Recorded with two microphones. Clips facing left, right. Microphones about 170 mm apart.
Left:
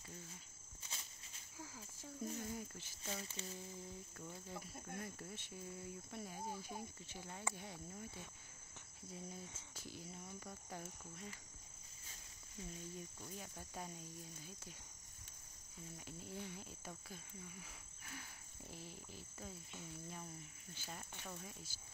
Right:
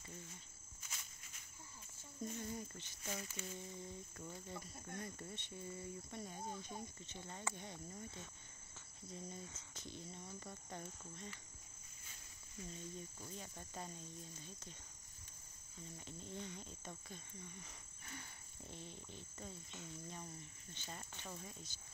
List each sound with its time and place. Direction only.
0.8 s insect: 30° left (ahead or behind)
2.2 s cricket: 5° left (ahead or behind)
3.1 s speech: 30° left (ahead or behind)
3.5 s cricket: centre (ahead or behind)
13.2 s cricket: 5° left (ahead or behind)
16.1 s cricket: 5° left (ahead or behind)